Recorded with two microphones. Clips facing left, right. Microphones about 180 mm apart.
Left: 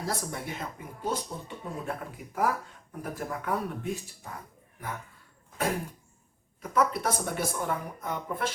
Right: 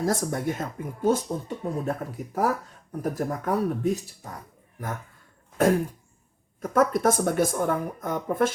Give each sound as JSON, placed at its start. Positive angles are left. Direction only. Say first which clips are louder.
{"t": 0.0, "sound": "speech", "louder": "right 8 dB", "side_deg": -45}
{"t": 6.6, "sound": "speech", "louder": "right 5 dB", "side_deg": -50}